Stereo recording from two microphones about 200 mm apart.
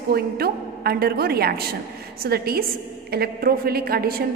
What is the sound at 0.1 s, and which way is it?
A woman's voice, 50° right (ahead or behind).